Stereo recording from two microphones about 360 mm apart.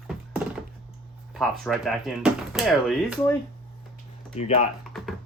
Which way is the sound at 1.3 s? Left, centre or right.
Centre.